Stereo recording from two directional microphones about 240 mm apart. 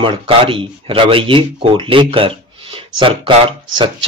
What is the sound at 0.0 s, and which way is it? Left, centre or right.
Speech, right.